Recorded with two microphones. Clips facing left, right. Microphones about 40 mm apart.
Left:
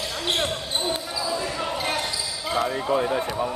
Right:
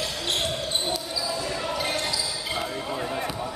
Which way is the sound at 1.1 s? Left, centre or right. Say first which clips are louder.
Left 2 dB; left.